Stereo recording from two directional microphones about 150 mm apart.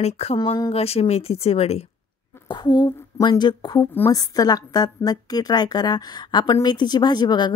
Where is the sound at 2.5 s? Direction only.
30° left (ahead or behind).